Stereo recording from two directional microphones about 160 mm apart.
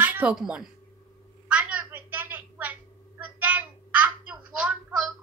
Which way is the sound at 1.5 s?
5° right (ahead or behind).